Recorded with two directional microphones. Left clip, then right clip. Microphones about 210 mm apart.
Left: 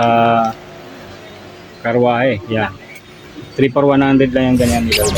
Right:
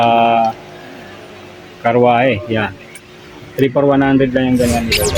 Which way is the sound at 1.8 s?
20° right (ahead or behind).